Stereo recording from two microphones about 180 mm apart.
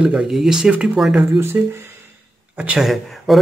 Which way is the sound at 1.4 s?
15° right (ahead or behind).